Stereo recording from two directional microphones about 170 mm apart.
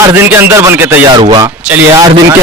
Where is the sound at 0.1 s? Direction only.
15° right (ahead or behind).